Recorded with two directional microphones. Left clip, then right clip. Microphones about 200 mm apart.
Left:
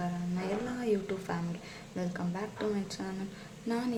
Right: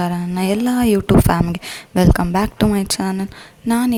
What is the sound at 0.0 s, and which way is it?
A woman's voice, 55° right (ahead or behind).